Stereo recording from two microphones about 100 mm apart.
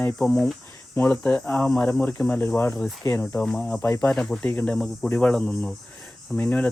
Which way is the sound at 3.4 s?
5° left (ahead or behind).